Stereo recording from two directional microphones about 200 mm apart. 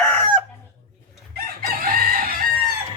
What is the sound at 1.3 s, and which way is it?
Chicken, 50° right (ahead or behind).